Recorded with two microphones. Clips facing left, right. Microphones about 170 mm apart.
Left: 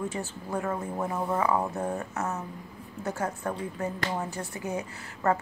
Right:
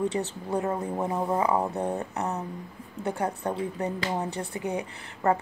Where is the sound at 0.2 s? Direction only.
25° right (ahead or behind).